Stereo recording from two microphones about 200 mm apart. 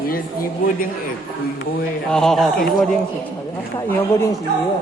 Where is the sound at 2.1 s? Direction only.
Centre (ahead or behind).